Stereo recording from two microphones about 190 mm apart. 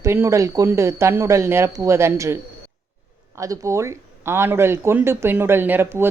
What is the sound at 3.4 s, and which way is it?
A woman's voice, 15° right (ahead or behind).